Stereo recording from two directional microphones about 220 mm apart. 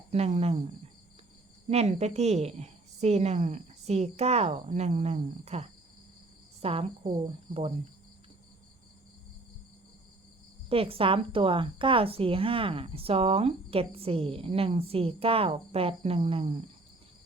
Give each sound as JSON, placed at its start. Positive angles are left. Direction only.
{"t": 0.1, "sound": "a woman's voice", "side_deg": -30}
{"t": 1.7, "sound": "a woman's voice", "side_deg": -30}
{"t": 10.7, "sound": "a woman's voice", "side_deg": -25}